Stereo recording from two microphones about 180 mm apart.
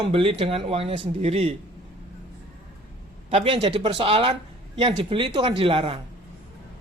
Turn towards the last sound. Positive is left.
turn(degrees=-30)  # may be behind; listen again after turning